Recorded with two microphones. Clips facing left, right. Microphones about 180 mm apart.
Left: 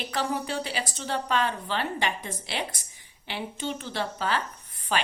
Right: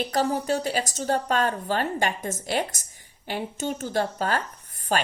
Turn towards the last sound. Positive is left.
turn(degrees=-45)  # may be behind; listen again after turning